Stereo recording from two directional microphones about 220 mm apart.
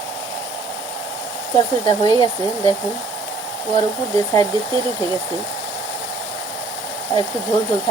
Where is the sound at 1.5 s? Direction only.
20° left (ahead or behind).